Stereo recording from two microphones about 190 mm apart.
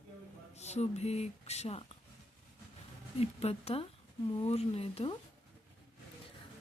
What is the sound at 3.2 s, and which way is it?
Speech, 30° left (ahead or behind).